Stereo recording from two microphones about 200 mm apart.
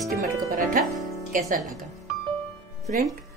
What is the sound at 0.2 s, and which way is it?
Speech, 40° right (ahead or behind).